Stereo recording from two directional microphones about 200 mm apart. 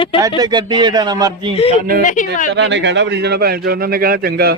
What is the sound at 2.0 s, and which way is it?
Speech, 40° left (ahead or behind).